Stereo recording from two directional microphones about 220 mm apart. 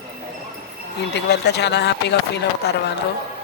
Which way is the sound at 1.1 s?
50° left (ahead or behind).